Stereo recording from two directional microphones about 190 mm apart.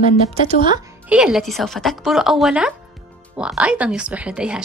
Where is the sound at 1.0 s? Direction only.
5° right (ahead or behind).